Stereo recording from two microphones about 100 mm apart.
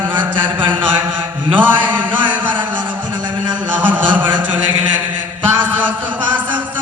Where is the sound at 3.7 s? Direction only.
20° right (ahead or behind).